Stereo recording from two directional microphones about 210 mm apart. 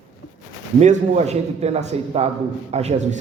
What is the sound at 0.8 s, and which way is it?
A man's voice, 30° right (ahead or behind).